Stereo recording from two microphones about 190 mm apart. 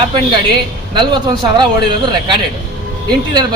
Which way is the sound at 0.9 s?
25° right (ahead or behind).